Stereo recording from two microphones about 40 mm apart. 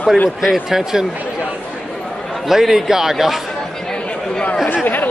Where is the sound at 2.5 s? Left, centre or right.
Centre.